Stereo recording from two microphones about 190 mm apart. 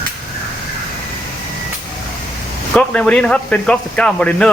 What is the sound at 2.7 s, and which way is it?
A man's voice, 5° left (ahead or behind).